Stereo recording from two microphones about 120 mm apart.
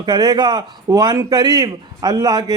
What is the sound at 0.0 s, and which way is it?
Speech, 35° right (ahead or behind).